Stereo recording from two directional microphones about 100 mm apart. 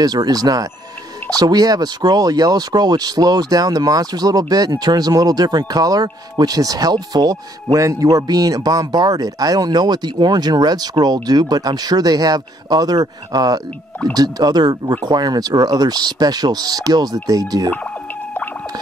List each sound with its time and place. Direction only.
0.0 s speech: 40° right (ahead or behind)